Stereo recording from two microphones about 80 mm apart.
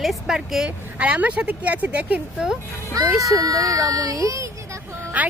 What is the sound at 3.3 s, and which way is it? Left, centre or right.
A child's voice, right.